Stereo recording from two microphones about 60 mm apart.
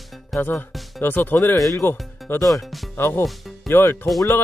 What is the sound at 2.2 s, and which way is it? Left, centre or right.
Music, centre.